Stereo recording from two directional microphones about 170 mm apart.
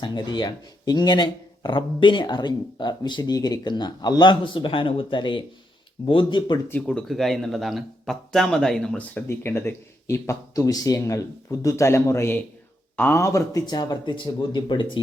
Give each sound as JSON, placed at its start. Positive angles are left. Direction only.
{"t": 0.0, "sound": "speech", "side_deg": 25}
{"t": 6.7, "sound": "speech", "side_deg": 10}